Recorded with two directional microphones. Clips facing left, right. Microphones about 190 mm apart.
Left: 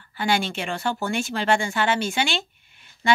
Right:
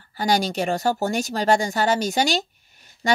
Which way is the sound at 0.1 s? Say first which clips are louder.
Right 2 dB; 40° right (ahead or behind).